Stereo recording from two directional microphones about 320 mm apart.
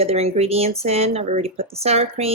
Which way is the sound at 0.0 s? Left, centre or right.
Centre.